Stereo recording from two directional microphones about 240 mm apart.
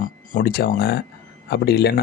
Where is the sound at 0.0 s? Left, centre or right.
Left.